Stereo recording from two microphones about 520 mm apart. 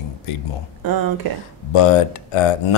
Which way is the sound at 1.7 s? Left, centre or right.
Left.